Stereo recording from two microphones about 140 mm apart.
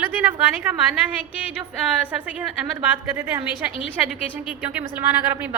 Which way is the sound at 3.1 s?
15° right (ahead or behind).